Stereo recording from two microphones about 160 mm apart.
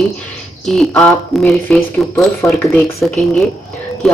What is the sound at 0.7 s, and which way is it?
Speech, 5° left (ahead or behind).